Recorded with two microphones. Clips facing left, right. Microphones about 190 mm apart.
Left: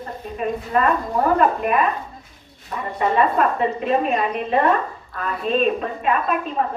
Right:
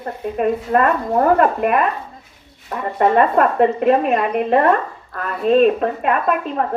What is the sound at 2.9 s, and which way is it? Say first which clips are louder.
A woman's voice: right 4 dB; 55° right (ahead or behind).